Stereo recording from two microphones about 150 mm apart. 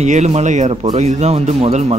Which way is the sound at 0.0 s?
50° right (ahead or behind).